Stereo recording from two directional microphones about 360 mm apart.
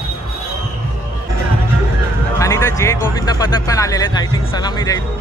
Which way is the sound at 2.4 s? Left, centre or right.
Centre.